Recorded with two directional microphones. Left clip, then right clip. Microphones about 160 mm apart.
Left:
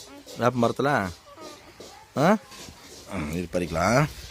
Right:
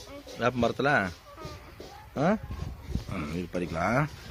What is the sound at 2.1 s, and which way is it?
Speech, 90° left.